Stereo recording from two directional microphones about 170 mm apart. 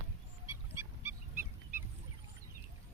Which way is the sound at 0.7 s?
15° right (ahead or behind).